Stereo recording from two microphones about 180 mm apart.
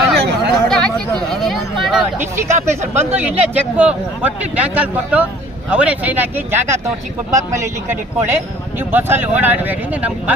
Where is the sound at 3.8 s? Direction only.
5° right (ahead or behind).